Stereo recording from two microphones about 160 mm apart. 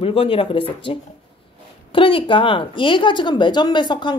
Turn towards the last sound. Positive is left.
turn(degrees=30)  # may be behind; listen again after turning